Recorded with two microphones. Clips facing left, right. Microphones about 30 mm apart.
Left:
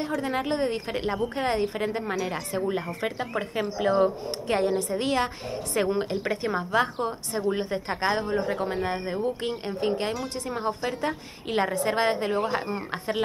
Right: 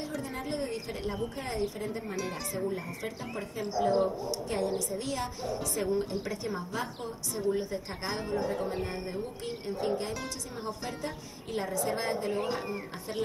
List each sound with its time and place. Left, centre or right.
0.2 s a woman's voice: left